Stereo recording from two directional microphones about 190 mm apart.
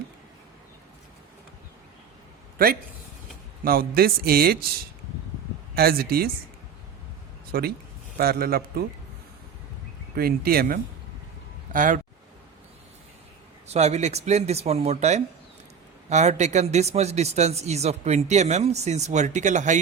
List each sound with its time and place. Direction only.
3.6 s a man's voice: 50° right (ahead or behind)
5.7 s speech: 55° right (ahead or behind)
7.5 s a man's voice: 50° right (ahead or behind)
10.2 s a man's voice: 55° right (ahead or behind)
13.7 s a man's voice: 35° right (ahead or behind)